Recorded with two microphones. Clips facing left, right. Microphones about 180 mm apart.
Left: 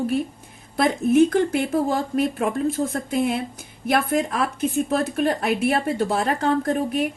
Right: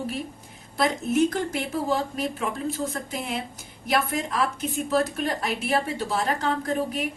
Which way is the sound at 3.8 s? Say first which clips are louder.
Left 5 dB; 55° left (ahead or behind).